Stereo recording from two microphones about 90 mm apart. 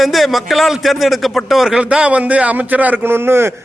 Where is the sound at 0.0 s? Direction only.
Centre (ahead or behind).